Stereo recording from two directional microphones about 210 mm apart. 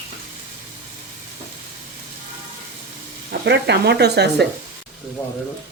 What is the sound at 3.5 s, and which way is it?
Speech, 55° right (ahead or behind).